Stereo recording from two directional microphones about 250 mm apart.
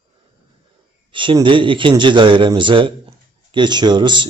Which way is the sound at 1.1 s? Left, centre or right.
Centre.